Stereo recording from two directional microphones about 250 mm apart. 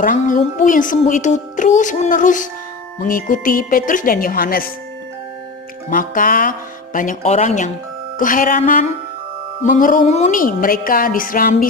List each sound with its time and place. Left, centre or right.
0.0 s a child's voice: left
5.9 s a child's voice: left